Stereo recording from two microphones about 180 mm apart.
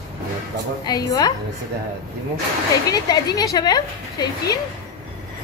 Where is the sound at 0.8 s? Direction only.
20° left (ahead or behind).